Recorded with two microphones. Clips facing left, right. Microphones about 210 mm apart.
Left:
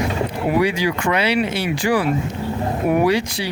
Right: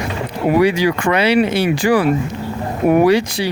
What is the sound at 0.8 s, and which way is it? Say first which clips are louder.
Speech: right 4 dB; 70° right (ahead or behind).